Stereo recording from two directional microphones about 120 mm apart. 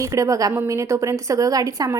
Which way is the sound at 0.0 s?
25° right (ahead or behind).